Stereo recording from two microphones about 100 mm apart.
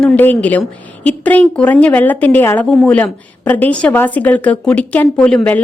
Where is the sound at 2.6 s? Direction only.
10° left (ahead or behind).